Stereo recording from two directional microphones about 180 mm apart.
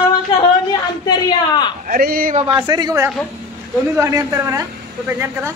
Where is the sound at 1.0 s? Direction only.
25° left (ahead or behind).